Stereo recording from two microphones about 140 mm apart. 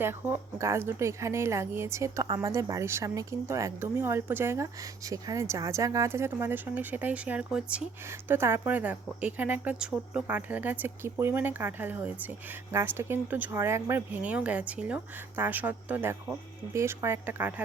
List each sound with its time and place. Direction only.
0.0 s speech: 15° right (ahead or behind)
2.2 s a woman's voice: 30° right (ahead or behind); by 17.5 s 15° right (ahead or behind)